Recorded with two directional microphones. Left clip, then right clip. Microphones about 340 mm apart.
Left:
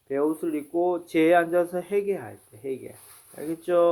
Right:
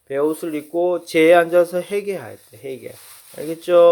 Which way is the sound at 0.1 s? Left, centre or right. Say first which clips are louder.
Right 5 dB; right.